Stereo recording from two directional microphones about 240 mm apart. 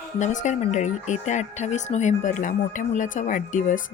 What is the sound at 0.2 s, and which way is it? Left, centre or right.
Speech, left.